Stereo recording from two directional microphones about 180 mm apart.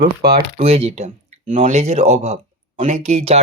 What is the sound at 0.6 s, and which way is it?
Speech, 35° right (ahead or behind).